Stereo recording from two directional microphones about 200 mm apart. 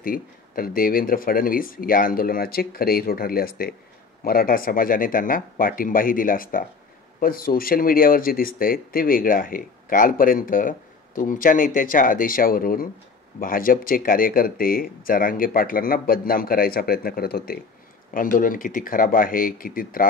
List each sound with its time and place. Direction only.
0.0 s speech: 45° left (ahead or behind)